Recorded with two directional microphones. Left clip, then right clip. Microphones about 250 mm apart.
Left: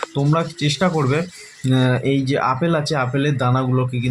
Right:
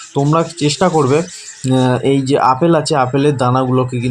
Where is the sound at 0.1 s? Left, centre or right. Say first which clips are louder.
Right 6 dB; centre.